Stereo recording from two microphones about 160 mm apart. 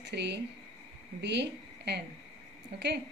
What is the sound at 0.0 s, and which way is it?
A woman's voice, 90° right.